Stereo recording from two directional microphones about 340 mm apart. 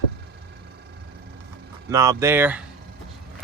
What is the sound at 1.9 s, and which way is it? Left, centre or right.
Speech, centre.